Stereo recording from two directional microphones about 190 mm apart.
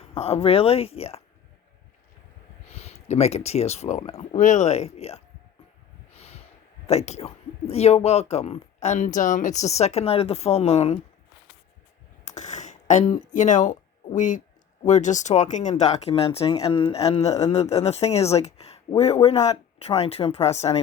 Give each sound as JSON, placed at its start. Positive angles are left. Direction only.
{"t": 0.0, "sound": "speech", "side_deg": 30}
{"t": 2.6, "sound": "speech", "side_deg": 35}
{"t": 6.1, "sound": "snort", "side_deg": 35}
{"t": 6.8, "sound": "speech", "side_deg": 35}
{"t": 12.2, "sound": "a sound", "side_deg": 40}
{"t": 14.2, "sound": "speech", "side_deg": 40}